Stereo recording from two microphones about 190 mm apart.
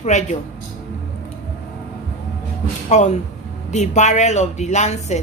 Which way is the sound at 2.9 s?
40° left (ahead or behind).